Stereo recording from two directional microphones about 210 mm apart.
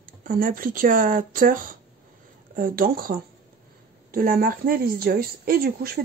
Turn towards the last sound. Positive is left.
turn(degrees=-45)  # may be behind; listen again after turning